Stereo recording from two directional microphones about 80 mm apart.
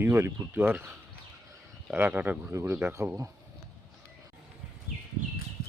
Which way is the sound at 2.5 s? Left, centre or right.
Right.